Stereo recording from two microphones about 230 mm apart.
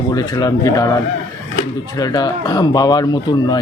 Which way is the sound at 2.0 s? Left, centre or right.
Centre.